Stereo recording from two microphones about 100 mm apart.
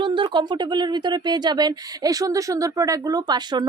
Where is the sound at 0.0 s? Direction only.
55° right (ahead or behind).